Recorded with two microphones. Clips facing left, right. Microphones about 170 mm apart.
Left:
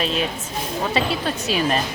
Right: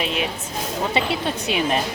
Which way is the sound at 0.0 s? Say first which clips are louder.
Left 1 dB; 15° right (ahead or behind).